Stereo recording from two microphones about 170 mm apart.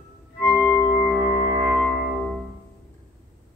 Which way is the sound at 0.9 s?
5° right (ahead or behind).